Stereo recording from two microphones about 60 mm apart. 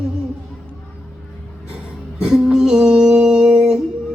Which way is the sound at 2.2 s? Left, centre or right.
Centre.